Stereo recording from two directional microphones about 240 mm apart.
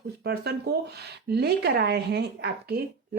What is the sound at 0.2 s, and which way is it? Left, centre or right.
Speech, right.